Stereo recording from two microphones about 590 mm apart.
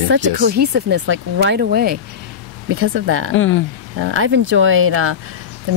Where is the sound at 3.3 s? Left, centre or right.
Centre.